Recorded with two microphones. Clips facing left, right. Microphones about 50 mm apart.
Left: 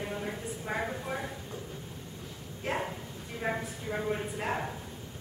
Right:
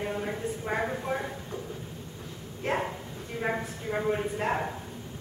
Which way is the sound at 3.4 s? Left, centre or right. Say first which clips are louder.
Right 3 dB; centre.